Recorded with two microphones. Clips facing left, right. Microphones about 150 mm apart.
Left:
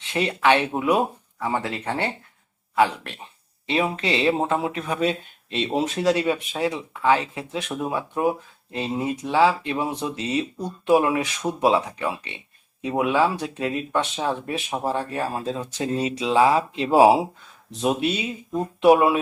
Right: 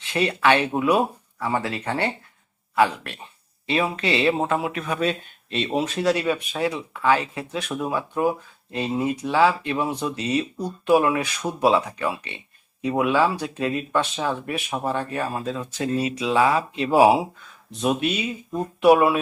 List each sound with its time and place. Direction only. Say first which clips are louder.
0.0 s speech: right 1 dB; 20° left (ahead or behind)